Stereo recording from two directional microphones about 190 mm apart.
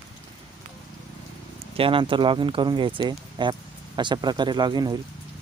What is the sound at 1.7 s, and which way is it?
Speech, 30° right (ahead or behind).